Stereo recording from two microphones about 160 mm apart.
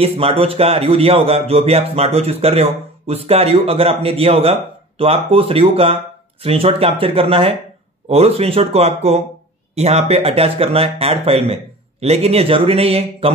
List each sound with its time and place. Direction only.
0.0 s speech: 40° right (ahead or behind)